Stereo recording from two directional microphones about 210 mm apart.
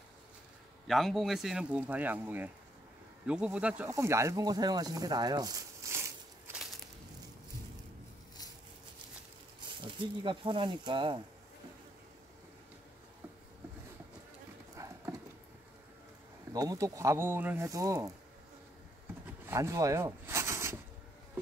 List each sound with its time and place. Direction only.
0.8 s speech: centre (ahead or behind)
9.7 s speech: 25° right (ahead or behind)
16.5 s speech: 15° right (ahead or behind)
19.2 s a sound: 10° right (ahead or behind)